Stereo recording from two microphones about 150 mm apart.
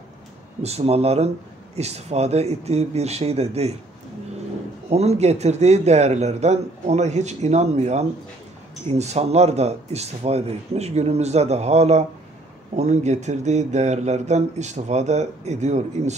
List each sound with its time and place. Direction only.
0.6 s speech: 45° right (ahead or behind)
4.8 s speech: 45° right (ahead or behind)